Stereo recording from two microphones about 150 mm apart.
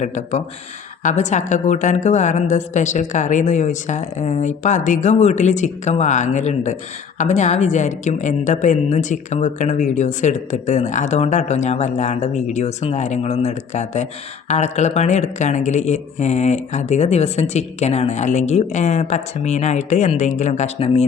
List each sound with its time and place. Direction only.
0.0 s a woman's voice: 50° left (ahead or behind)